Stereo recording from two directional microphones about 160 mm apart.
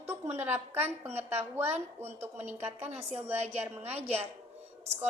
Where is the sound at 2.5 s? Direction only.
40° right (ahead or behind).